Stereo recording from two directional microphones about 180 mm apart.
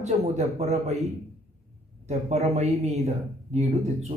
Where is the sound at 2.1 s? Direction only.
35° right (ahead or behind).